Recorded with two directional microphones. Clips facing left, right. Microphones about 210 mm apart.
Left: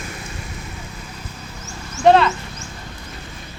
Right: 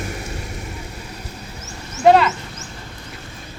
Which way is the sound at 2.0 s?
5° right (ahead or behind).